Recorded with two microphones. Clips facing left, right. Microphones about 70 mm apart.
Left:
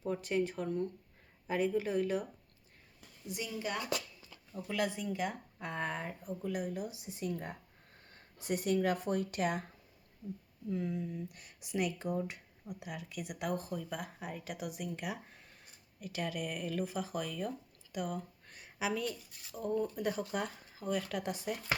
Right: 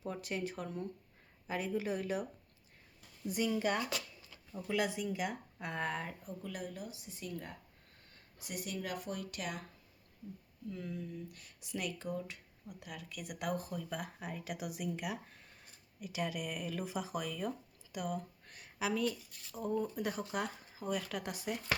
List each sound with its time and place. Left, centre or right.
0.0 s speech: centre
3.3 s speech: right
4.5 s speech: centre
6.1 s speech: centre
8.1 s speech: left
10.7 s speech: centre
19.5 s speech: centre